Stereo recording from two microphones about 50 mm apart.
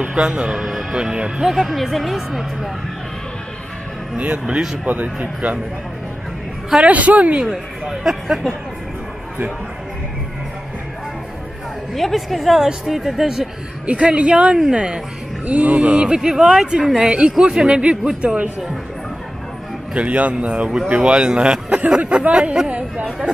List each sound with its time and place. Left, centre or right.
0.0 s speech: centre
0.6 s speech: centre
0.9 s speech: centre
1.4 s speech: centre
4.2 s speech: right
6.8 s speech: right
7.8 s speech: centre
11.9 s speech: centre
13.8 s speech: right
15.4 s speech: right
19.9 s speech: right
23.0 s speech: centre